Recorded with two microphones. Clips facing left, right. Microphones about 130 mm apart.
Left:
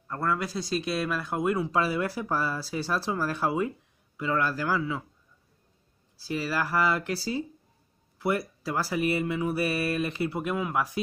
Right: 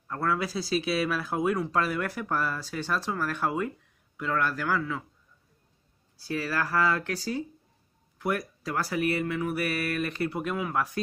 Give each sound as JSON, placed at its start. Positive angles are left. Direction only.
{"t": 0.1, "sound": "speech", "side_deg": 0}
{"t": 6.3, "sound": "speech", "side_deg": 10}
{"t": 10.3, "sound": "speech", "side_deg": 10}